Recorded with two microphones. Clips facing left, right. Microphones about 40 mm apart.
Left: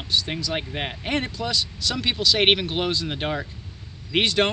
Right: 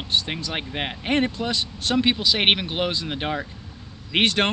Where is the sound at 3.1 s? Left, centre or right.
Centre.